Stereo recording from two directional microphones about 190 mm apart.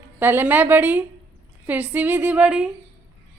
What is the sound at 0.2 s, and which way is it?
A woman's voice, 10° right (ahead or behind).